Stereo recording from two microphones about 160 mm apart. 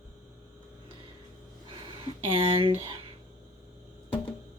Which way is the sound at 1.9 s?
35° right (ahead or behind).